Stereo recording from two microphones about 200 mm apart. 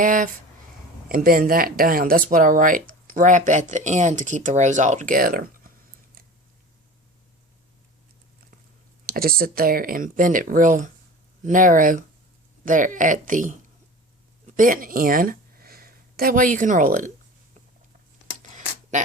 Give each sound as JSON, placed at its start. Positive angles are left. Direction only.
{"t": 0.0, "sound": "speech", "side_deg": -40}
{"t": 9.0, "sound": "speech", "side_deg": -50}
{"t": 18.5, "sound": "a sound", "side_deg": -40}